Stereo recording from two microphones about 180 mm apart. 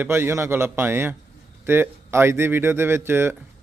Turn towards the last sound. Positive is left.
turn(degrees=-10)  # may be behind; listen again after turning